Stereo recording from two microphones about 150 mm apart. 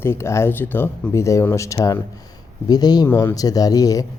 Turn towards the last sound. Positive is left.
turn(degrees=25)  # may be behind; listen again after turning